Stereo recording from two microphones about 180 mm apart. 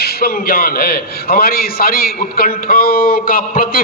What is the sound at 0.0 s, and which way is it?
A man's voice, 55° left (ahead or behind).